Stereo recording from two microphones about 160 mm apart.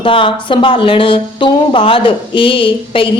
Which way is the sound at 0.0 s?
35° left (ahead or behind).